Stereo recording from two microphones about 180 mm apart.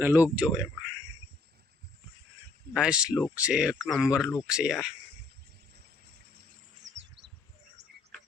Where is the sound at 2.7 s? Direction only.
5° right (ahead or behind).